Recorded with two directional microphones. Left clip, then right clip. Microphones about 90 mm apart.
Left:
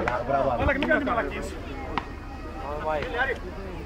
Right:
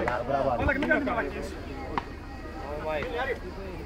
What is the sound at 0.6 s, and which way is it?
Speech, 20° left (ahead or behind).